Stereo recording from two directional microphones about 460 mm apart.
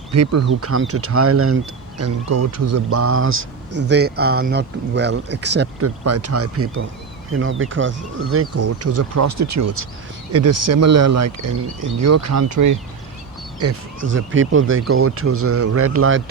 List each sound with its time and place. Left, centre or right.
0.1 s speech: right